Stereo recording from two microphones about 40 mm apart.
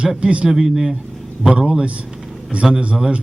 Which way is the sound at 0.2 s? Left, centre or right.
Right.